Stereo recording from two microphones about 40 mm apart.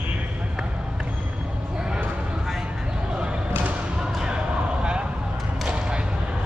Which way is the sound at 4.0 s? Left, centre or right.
Centre.